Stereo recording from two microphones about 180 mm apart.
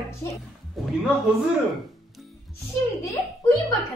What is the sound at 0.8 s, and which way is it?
Speech, centre (ahead or behind).